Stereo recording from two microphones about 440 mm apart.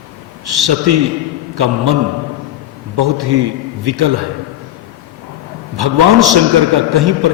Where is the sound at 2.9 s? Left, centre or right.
Right.